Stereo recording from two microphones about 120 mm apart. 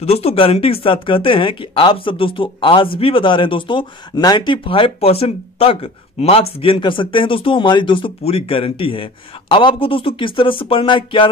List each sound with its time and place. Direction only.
0.0 s speech: 60° left (ahead or behind)